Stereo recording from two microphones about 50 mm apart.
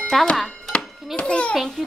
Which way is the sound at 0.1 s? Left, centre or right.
Centre.